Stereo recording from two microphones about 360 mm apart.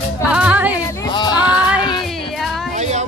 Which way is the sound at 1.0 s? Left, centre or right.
Centre.